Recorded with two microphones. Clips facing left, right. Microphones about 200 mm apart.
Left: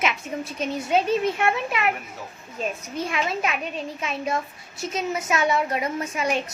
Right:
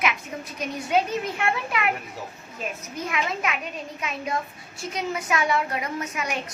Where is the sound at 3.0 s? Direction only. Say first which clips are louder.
Left 1 dB; 30° left (ahead or behind).